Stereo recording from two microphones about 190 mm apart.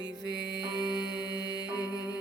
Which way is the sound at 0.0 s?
20° left (ahead or behind).